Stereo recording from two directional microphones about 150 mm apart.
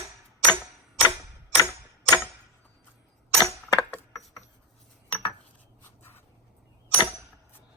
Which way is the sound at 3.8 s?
5° left (ahead or behind).